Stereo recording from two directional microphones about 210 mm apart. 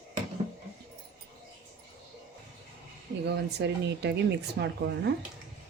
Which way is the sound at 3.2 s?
55° right (ahead or behind).